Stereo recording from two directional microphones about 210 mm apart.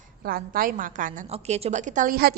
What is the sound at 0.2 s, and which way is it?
A woman's voice, 45° right (ahead or behind).